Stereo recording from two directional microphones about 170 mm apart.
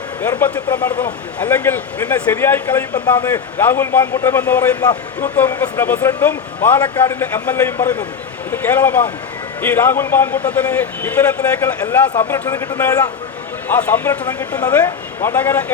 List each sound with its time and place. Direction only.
0.2 s speech: 10° left (ahead or behind)
4.8 s speech: 25° left (ahead or behind)